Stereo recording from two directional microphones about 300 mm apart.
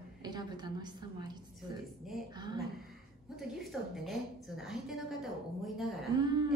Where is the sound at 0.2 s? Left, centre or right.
Centre.